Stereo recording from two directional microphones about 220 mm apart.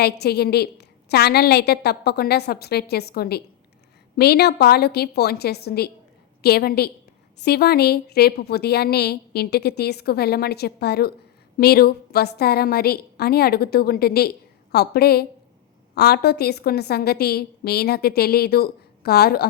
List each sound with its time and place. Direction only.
0.0 s a woman's voice: 45° left (ahead or behind)